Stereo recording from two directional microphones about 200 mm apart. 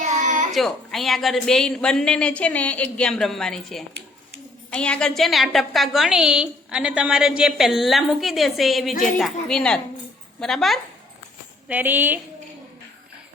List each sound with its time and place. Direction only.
0.0 s a sound: 40° right (ahead or behind)
0.5 s a woman's voice: centre (ahead or behind)
11.7 s a woman's voice: 10° right (ahead or behind)